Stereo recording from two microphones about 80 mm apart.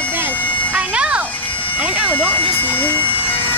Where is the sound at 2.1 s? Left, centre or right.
Centre.